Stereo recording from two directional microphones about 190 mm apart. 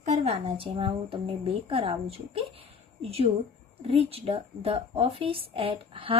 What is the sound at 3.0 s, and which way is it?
A woman's voice, 30° right (ahead or behind).